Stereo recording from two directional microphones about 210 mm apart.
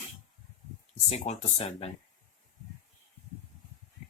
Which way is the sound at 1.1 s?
30° left (ahead or behind).